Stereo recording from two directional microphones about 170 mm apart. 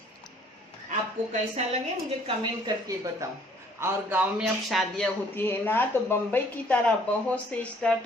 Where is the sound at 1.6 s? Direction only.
40° right (ahead or behind).